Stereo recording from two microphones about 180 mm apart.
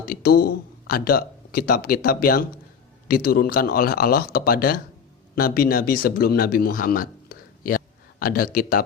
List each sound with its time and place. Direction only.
0.0 s speech: 55° left (ahead or behind)
8.2 s speech: 55° left (ahead or behind)